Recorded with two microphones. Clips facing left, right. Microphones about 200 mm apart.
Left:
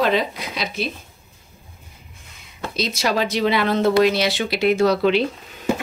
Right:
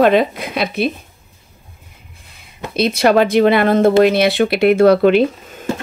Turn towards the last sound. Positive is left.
turn(degrees=-50)  # may be behind; listen again after turning